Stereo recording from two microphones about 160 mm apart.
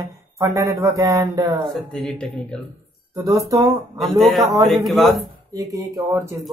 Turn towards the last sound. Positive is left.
turn(degrees=-20)  # may be behind; listen again after turning